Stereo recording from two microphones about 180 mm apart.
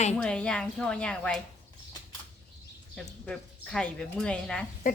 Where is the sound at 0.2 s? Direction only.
5° left (ahead or behind).